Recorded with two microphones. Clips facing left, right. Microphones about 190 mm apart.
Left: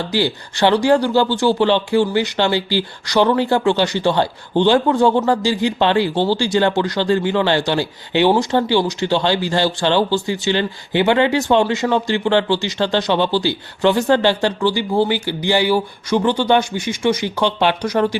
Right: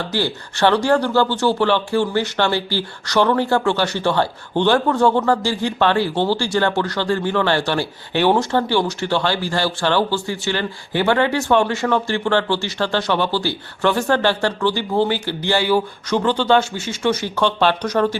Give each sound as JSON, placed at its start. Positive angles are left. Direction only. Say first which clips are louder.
{"t": 0.1, "sound": "speech", "louder": "left 3 dB", "side_deg": 15}